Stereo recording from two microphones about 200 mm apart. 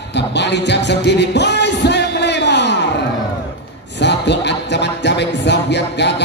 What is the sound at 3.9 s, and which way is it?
Music, 60° left (ahead or behind).